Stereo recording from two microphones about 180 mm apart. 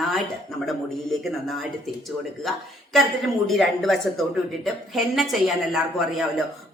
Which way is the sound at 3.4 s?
Centre (ahead or behind).